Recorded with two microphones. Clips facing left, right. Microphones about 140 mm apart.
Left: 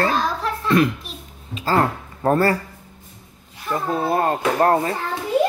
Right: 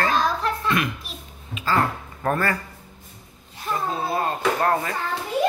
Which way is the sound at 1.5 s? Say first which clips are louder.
Left 3 dB; 40° left (ahead or behind).